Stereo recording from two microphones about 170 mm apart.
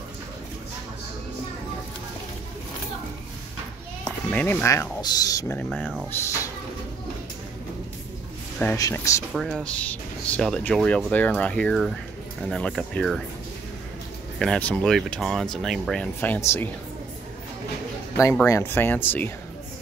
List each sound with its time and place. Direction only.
4.3 s speech: 10° left (ahead or behind)
5.6 s speech: 5° left (ahead or behind)
6.1 s speech: 15° left (ahead or behind)
8.7 s speech: 20° left (ahead or behind)
9.3 s speech: centre (ahead or behind)
14.4 s speech: 5° left (ahead or behind)
18.5 s speech: 10° left (ahead or behind)